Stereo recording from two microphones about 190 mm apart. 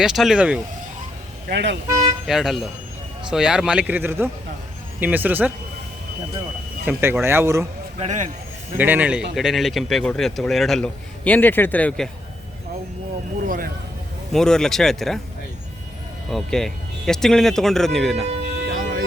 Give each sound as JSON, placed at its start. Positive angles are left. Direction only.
{"t": 0.0, "sound": "speech", "side_deg": 0}
{"t": 1.5, "sound": "speech", "side_deg": -65}
{"t": 1.9, "sound": "toot", "side_deg": -25}
{"t": 2.2, "sound": "speech", "side_deg": 0}
{"t": 6.8, "sound": "speech", "side_deg": -10}
{"t": 7.9, "sound": "speech", "side_deg": -35}
{"t": 8.8, "sound": "speech", "side_deg": -10}
{"t": 14.3, "sound": "speech", "side_deg": 5}
{"t": 16.3, "sound": "speech", "side_deg": 0}
{"t": 18.8, "sound": "a sound", "side_deg": -45}